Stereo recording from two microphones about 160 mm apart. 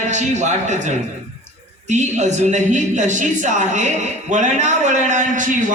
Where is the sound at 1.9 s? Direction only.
50° right (ahead or behind).